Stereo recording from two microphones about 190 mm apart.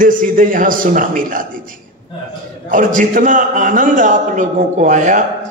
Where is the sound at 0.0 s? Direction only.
45° right (ahead or behind).